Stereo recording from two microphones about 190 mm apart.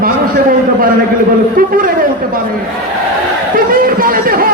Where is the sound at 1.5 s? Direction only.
50° right (ahead or behind).